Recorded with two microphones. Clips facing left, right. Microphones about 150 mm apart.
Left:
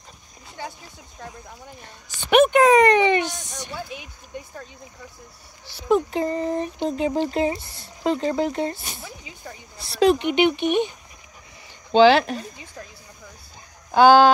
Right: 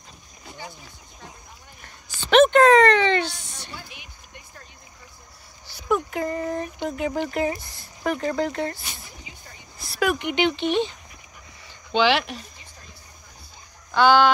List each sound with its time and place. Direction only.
2.2 s a sound: 10° left (ahead or behind)
5.8 s a sound: 25° left (ahead or behind)
8.0 s speech: 20° left (ahead or behind)
9.8 s speech: 30° left (ahead or behind)
11.9 s speech: 35° left (ahead or behind)
13.9 s speech: 40° left (ahead or behind)